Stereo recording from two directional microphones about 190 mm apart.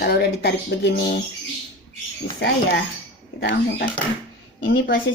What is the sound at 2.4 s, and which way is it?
Speech, 60° left (ahead or behind).